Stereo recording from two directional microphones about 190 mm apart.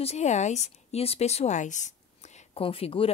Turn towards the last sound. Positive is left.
turn(degrees=30)  # may be behind; listen again after turning